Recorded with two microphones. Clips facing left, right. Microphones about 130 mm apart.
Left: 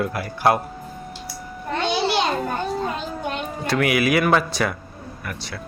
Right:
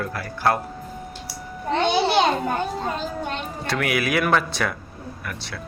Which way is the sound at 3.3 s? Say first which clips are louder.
Left 3 dB; centre (ahead or behind).